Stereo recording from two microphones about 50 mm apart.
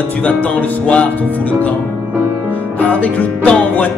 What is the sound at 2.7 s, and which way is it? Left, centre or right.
Speech, left.